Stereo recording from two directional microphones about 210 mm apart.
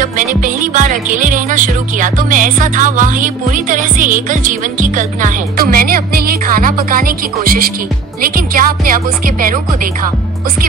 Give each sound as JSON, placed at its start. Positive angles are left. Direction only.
{"t": 0.0, "sound": "music", "side_deg": -40}
{"t": 8.2, "sound": "speech", "side_deg": -45}